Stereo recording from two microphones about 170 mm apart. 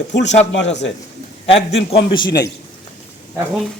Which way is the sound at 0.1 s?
90° left.